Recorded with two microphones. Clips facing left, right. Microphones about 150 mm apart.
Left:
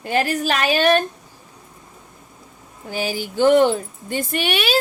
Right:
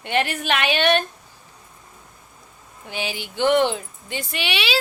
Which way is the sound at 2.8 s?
40° left (ahead or behind).